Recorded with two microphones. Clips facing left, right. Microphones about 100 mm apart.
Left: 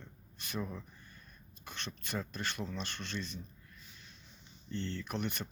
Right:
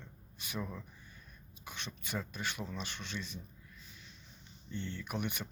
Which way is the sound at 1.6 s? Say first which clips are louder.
Left 1 dB; 10° right (ahead or behind).